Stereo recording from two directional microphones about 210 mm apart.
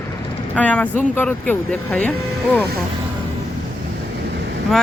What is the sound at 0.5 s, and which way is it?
Speech, 5° left (ahead or behind).